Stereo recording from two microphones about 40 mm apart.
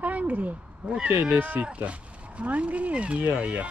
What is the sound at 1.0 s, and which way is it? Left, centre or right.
Speech, right.